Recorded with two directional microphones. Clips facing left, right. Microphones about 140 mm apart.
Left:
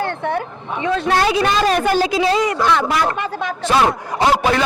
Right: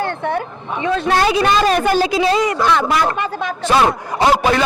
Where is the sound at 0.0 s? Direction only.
15° right (ahead or behind).